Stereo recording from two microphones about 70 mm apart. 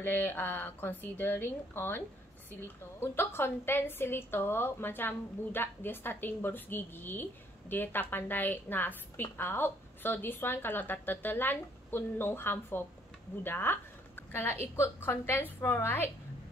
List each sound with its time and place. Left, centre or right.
0.0 s a woman's voice: left